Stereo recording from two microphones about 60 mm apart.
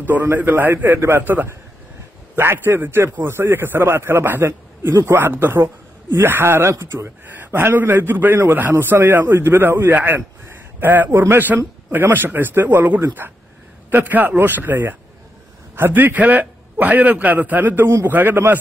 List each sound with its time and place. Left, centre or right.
0.0 s a man's voice: right
0.9 s speech: right
1.2 s a man's voice: right
6.7 s speech: right
7.5 s a man's voice: right
17.8 s speech: right
18.1 s a man's voice: right